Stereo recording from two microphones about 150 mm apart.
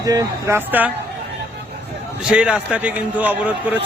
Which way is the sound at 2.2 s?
5° right (ahead or behind).